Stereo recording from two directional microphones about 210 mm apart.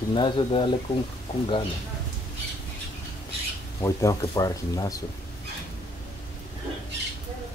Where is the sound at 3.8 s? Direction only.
15° left (ahead or behind).